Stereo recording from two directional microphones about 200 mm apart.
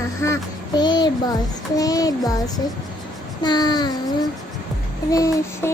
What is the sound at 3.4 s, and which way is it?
Child singing, 20° left (ahead or behind).